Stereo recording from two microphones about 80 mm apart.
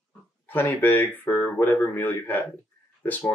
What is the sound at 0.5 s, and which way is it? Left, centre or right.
Speech, left.